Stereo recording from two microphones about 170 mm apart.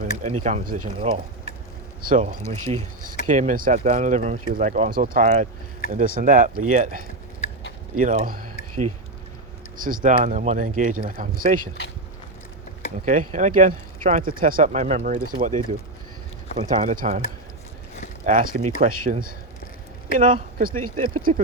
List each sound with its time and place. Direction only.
0.0 s speech: 45° right (ahead or behind)
0.9 s speech: 35° right (ahead or behind)
2.0 s speech: 50° right (ahead or behind)
13.1 s speech: 45° right (ahead or behind)
16.7 s speech: 50° right (ahead or behind)
18.3 s speech: 50° right (ahead or behind)